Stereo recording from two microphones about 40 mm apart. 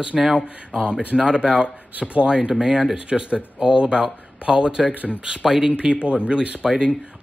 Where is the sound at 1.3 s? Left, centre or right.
Right.